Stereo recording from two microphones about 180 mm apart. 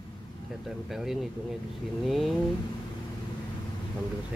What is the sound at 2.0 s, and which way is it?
Speech, centre (ahead or behind).